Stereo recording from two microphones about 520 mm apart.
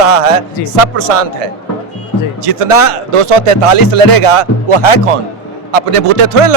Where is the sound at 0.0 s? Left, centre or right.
Right.